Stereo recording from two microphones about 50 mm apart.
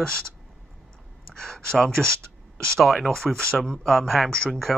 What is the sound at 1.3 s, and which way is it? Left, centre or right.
Speech, centre.